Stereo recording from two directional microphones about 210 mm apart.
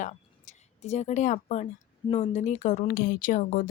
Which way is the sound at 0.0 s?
35° left (ahead or behind).